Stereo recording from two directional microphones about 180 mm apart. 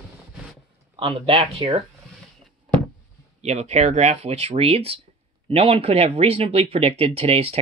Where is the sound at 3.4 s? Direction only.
35° right (ahead or behind).